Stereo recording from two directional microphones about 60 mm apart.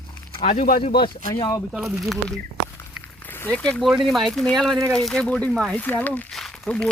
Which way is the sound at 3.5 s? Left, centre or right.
Centre.